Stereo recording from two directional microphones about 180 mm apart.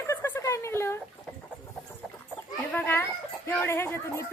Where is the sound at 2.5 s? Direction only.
10° left (ahead or behind).